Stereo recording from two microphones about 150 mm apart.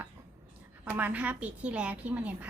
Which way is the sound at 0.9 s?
10° right (ahead or behind).